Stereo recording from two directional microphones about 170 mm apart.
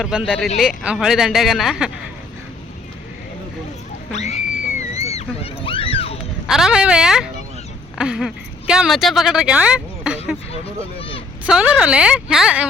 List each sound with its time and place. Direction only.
0.0 s speech: centre (ahead or behind)
4.1 s speech: 40° left (ahead or behind)
5.0 s a sound: 35° left (ahead or behind)
6.5 s speech: 5° right (ahead or behind)
10.5 s speech: 35° left (ahead or behind)
11.4 s speech: 5° right (ahead or behind)